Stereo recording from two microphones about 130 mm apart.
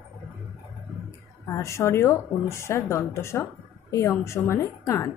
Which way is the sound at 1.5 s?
20° left (ahead or behind).